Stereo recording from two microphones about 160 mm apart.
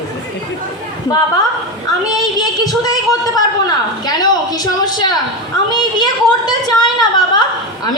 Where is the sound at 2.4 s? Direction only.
25° left (ahead or behind).